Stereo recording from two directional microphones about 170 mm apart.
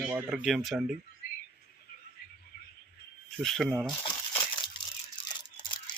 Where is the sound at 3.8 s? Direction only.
25° left (ahead or behind).